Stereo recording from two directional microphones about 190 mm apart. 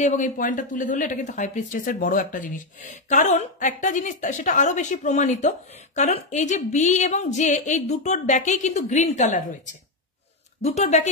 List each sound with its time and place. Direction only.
0.0 s speech: 40° left (ahead or behind)
10.6 s speech: 35° left (ahead or behind)